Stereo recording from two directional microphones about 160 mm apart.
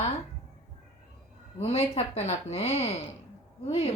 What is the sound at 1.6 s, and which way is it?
Speech, 45° left (ahead or behind).